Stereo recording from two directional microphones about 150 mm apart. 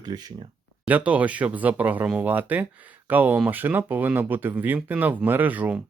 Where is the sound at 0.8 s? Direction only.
10° right (ahead or behind).